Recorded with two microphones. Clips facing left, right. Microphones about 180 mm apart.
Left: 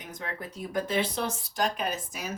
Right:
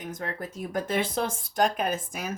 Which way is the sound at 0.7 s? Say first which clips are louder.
Even; 45° right (ahead or behind).